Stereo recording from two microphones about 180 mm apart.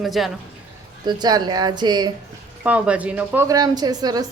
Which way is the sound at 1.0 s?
25° right (ahead or behind).